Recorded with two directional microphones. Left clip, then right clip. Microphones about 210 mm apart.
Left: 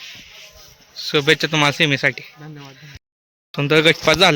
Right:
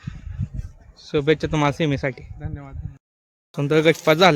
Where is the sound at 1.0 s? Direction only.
5° right (ahead or behind).